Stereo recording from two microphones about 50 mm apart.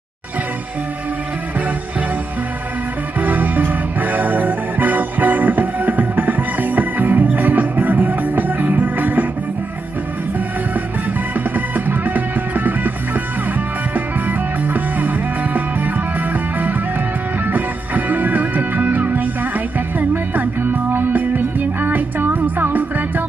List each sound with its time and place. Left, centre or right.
3.2 s music: right
11.3 s music: right